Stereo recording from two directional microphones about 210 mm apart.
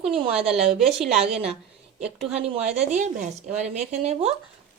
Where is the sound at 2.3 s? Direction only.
30° right (ahead or behind).